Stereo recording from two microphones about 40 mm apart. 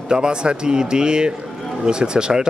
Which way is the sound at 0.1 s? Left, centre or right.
Right.